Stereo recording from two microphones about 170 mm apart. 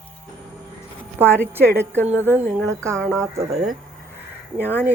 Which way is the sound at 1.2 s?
5° left (ahead or behind).